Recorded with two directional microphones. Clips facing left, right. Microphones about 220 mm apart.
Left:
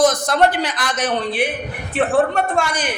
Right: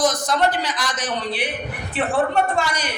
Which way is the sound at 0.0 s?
55° left (ahead or behind).